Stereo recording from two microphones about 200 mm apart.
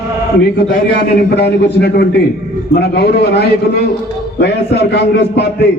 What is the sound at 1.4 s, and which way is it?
A man's voice, 55° left (ahead or behind).